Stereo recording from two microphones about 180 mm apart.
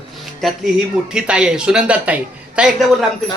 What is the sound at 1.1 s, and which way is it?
A woman's voice, 5° right (ahead or behind).